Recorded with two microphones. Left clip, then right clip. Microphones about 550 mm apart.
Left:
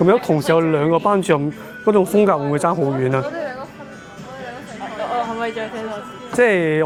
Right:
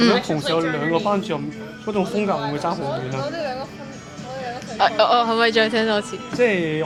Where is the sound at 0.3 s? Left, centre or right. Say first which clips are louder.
Left 5 dB; left.